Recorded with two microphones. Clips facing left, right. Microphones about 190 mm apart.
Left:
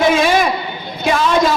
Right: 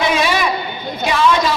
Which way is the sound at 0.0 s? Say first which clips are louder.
Left 4 dB; 50° left (ahead or behind).